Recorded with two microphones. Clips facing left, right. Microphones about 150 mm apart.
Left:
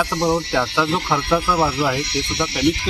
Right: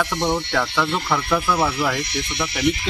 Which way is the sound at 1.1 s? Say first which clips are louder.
Left 1 dB; 10° left (ahead or behind).